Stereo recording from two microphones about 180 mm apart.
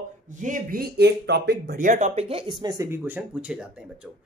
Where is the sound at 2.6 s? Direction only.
15° right (ahead or behind).